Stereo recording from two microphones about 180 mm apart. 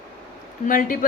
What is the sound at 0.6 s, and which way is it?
Speech, 50° left (ahead or behind).